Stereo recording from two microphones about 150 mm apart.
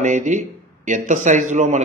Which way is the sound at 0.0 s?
55° right (ahead or behind).